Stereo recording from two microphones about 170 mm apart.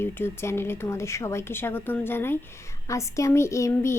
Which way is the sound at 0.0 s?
15° left (ahead or behind).